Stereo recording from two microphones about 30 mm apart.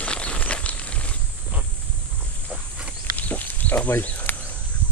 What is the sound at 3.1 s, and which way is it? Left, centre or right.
Pig, left.